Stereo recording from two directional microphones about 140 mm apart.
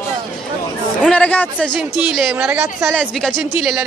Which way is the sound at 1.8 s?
5° right (ahead or behind).